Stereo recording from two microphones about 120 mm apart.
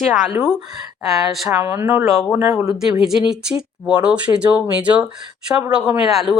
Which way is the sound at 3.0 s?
5° right (ahead or behind).